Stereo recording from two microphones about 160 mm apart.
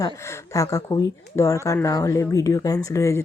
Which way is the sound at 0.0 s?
20° left (ahead or behind).